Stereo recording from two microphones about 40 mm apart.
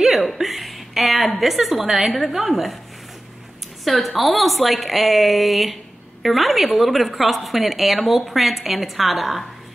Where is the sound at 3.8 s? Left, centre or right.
Centre.